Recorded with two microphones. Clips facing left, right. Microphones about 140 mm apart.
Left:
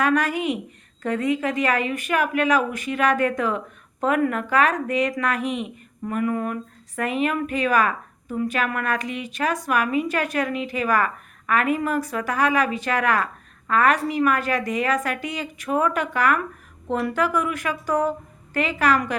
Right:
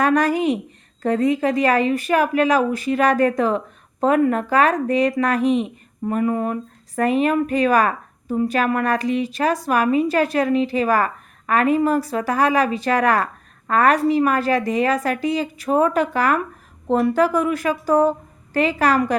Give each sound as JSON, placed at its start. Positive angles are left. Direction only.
{"t": 0.0, "sound": "a woman's voice", "side_deg": -35}